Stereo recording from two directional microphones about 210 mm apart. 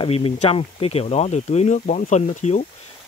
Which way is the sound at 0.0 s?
25° left (ahead or behind).